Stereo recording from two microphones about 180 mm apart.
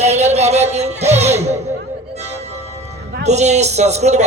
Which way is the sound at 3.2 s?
40° right (ahead or behind).